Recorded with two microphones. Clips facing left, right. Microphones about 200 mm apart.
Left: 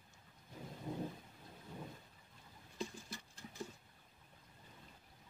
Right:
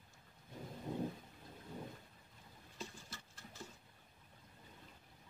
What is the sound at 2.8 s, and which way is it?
Patter, 15° left (ahead or behind).